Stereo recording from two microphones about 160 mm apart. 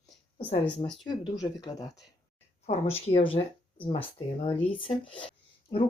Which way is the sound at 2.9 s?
35° left (ahead or behind).